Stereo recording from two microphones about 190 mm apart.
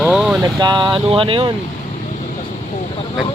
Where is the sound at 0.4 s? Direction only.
20° right (ahead or behind).